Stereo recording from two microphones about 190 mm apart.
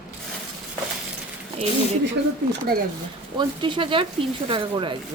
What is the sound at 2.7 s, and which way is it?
Speech, 55° right (ahead or behind).